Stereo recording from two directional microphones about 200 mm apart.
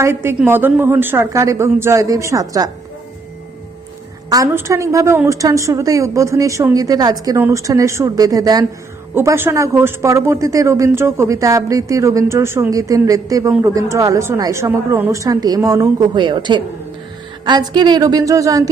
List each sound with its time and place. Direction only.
0.0 s a woman's voice: 10° right (ahead or behind)
4.3 s a woman's voice: 15° right (ahead or behind)